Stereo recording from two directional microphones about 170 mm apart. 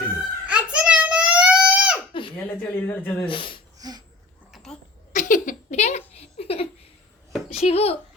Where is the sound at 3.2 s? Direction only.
30° left (ahead or behind).